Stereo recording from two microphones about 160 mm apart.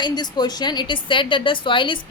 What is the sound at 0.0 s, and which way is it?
A woman's voice, 25° left (ahead or behind).